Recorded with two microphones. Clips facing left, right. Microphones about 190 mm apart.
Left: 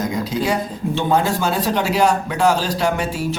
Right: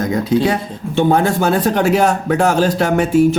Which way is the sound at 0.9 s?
55° right (ahead or behind).